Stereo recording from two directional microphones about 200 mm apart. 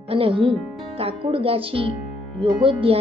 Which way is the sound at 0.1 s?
25° right (ahead or behind).